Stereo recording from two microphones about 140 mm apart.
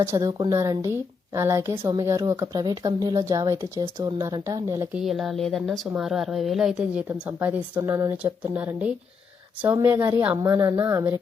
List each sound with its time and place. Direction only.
0.0 s a woman's voice: 25° right (ahead or behind)
4.9 s a woman's voice: centre (ahead or behind); by 8.1 s 25° right (ahead or behind)
8.2 s a woman's voice: 10° right (ahead or behind)